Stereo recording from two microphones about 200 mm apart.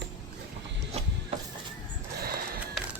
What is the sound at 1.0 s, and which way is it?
Printer, 30° right (ahead or behind).